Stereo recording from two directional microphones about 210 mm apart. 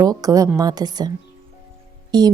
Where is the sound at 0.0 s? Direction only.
15° right (ahead or behind).